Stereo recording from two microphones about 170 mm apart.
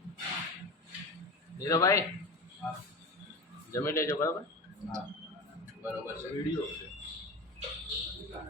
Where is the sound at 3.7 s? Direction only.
15° left (ahead or behind).